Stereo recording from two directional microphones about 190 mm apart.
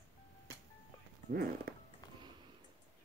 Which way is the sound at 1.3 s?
50° right (ahead or behind).